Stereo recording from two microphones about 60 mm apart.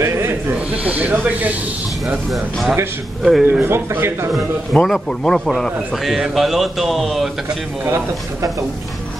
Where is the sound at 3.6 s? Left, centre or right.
Right.